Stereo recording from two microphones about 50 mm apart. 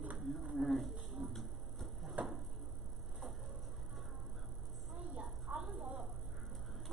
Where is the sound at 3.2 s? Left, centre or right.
Centre.